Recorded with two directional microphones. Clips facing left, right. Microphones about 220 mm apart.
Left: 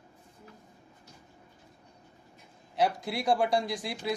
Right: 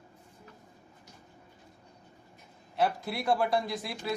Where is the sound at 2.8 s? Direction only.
20° left (ahead or behind).